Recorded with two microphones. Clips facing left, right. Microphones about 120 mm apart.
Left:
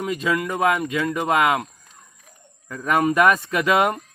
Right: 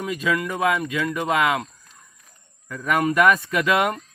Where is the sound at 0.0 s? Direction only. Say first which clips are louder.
Left 1 dB; 40° left (ahead or behind).